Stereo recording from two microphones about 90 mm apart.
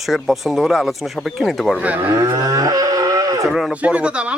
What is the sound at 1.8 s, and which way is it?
Speech, 15° right (ahead or behind).